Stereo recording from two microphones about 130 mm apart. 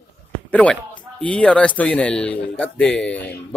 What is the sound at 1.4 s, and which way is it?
A man's voice, 10° left (ahead or behind).